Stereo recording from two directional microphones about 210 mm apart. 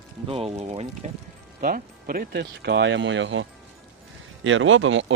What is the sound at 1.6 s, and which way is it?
Speech, 45° right (ahead or behind).